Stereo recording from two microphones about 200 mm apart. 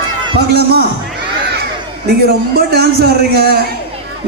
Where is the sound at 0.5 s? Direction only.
50° right (ahead or behind).